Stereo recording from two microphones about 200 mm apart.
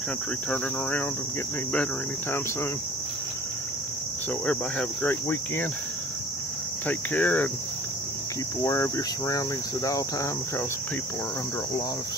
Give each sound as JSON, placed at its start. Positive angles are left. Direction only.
{"t": 0.5, "sound": "cricket", "side_deg": 10}
{"t": 4.5, "sound": "cricket", "side_deg": 10}
{"t": 6.9, "sound": "cricket", "side_deg": 10}
{"t": 8.6, "sound": "cricket", "side_deg": 15}